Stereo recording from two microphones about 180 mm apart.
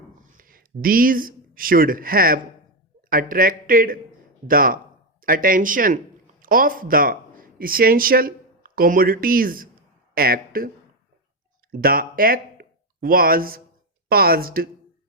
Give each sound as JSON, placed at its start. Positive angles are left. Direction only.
{"t": 0.2, "sound": "speech", "side_deg": -50}
{"t": 11.7, "sound": "speech", "side_deg": -55}